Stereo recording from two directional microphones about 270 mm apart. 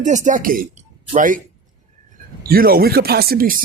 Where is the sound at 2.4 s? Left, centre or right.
Right.